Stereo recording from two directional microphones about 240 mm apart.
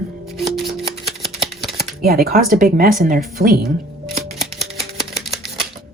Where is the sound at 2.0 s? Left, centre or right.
Right.